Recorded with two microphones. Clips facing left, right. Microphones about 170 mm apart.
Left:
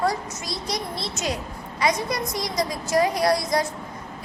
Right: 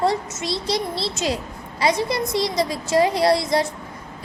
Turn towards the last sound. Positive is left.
turn(degrees=-25)  # may be behind; listen again after turning